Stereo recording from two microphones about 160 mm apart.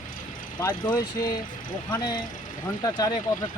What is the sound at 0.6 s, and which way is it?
Speech, 25° left (ahead or behind).